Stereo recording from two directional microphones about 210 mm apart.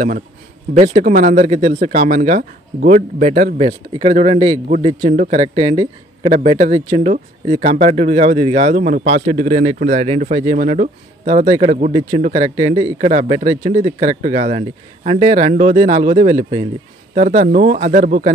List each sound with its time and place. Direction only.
0.7 s speech: 30° right (ahead or behind)